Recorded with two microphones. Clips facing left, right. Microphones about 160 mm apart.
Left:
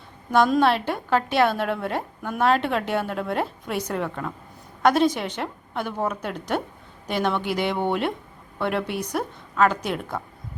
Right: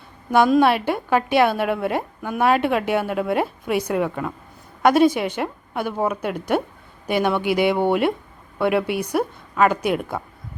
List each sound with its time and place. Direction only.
0.3 s a woman's voice: 10° right (ahead or behind)